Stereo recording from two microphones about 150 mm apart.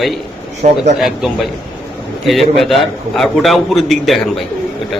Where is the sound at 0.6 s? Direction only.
55° right (ahead or behind).